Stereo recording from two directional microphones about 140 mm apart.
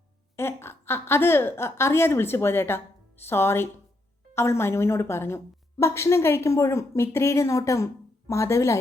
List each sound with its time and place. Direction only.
0.3 s a woman's voice: 15° left (ahead or behind)